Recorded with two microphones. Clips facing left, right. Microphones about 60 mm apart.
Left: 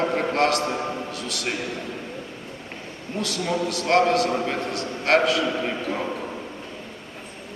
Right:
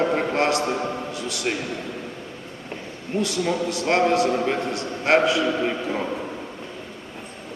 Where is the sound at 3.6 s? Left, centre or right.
Right.